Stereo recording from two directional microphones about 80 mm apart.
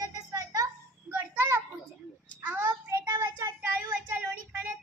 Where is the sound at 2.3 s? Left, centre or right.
Right.